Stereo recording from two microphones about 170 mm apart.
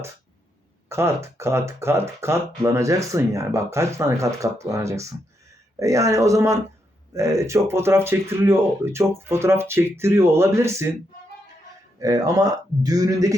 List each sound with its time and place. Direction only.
0.9 s speech: 15° right (ahead or behind)
11.9 s speech: 20° right (ahead or behind)